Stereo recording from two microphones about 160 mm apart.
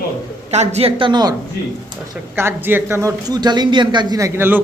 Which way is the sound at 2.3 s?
15° right (ahead or behind).